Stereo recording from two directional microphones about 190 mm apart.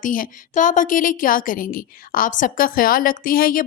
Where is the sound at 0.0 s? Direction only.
45° left (ahead or behind).